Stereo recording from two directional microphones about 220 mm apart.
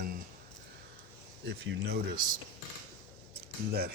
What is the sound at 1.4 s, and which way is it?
Speech, 50° right (ahead or behind).